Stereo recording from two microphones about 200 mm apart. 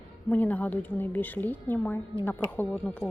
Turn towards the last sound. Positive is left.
turn(degrees=10)  # may be behind; listen again after turning